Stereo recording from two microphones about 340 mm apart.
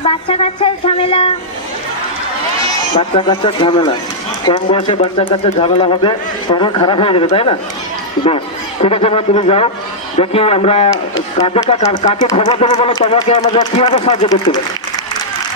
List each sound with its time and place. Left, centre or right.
0.0 s speech: centre
3.0 s speech: centre
8.8 s speech: centre